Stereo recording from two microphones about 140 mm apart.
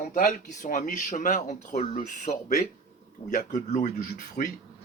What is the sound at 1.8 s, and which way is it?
Speech, 60° left (ahead or behind).